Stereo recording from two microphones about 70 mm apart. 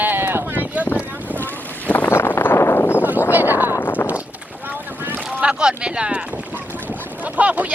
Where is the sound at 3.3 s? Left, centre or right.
Right.